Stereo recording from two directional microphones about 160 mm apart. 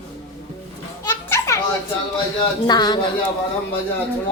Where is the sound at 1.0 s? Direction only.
20° left (ahead or behind).